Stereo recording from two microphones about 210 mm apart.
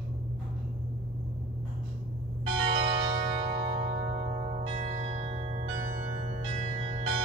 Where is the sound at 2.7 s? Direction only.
60° right (ahead or behind).